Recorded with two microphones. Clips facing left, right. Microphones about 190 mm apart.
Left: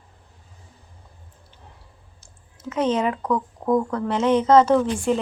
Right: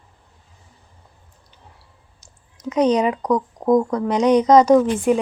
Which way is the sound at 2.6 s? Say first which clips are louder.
Right 5 dB; 15° right (ahead or behind).